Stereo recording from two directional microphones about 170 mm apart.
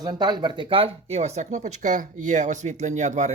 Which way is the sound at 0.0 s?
25° right (ahead or behind).